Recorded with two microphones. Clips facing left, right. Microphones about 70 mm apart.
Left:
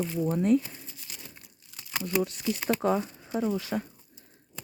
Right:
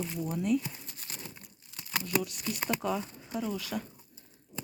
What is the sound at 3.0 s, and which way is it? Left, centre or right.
Speech, left.